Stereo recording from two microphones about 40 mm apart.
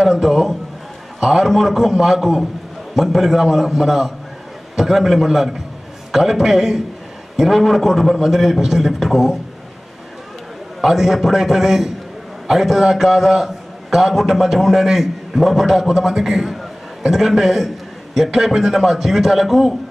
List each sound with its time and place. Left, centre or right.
0.0 s a man's voice: centre
10.8 s a man's voice: centre